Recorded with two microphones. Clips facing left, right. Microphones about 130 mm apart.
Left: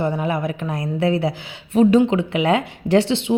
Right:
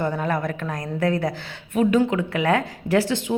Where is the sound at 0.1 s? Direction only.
15° left (ahead or behind).